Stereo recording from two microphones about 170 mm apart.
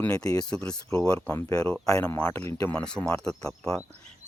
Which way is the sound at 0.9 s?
20° left (ahead or behind).